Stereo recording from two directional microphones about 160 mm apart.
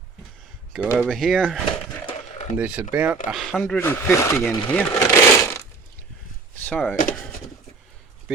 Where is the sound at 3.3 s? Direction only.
Centre (ahead or behind).